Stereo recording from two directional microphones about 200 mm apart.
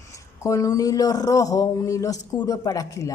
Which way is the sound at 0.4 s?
15° left (ahead or behind).